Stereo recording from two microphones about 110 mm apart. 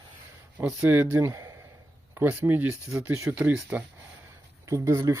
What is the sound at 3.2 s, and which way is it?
Speech, 10° right (ahead or behind).